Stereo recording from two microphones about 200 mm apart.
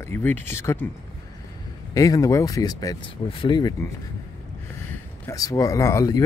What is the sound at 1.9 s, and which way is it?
Speech, 15° left (ahead or behind).